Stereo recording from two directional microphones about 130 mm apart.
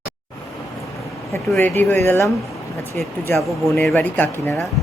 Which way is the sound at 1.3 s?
20° left (ahead or behind).